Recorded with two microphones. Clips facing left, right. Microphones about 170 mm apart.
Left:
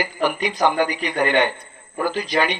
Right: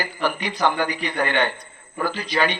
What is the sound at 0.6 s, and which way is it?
Speech, 15° left (ahead or behind).